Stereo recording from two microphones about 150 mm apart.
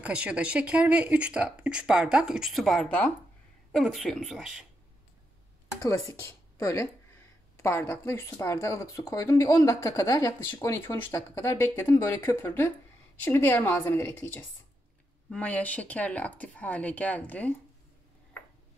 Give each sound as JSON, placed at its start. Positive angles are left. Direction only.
{"t": 0.0, "sound": "a woman's voice", "side_deg": -10}
{"t": 5.8, "sound": "speech", "side_deg": 20}